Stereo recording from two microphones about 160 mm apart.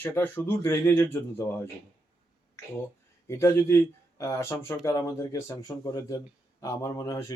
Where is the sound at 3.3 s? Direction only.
20° left (ahead or behind).